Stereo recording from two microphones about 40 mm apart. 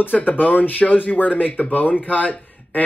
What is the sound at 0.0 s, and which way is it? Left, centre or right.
Speech, left.